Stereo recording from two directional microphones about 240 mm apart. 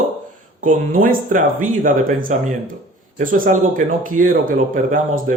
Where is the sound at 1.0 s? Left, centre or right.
Right.